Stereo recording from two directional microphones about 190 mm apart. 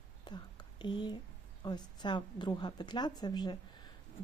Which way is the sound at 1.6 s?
25° left (ahead or behind).